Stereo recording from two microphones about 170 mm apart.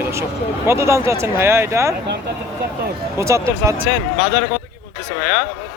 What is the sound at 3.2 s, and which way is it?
Speech, 15° right (ahead or behind).